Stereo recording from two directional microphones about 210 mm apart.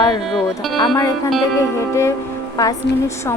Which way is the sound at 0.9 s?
15° left (ahead or behind).